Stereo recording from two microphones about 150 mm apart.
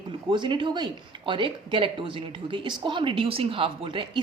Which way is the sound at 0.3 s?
35° right (ahead or behind).